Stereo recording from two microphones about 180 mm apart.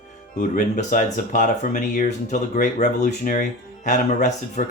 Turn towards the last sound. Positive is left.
turn(degrees=40)  # may be behind; listen again after turning